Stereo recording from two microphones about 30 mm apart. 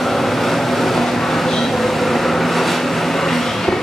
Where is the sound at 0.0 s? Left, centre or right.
Centre.